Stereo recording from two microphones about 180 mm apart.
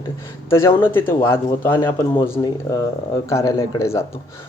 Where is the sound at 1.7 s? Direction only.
25° left (ahead or behind).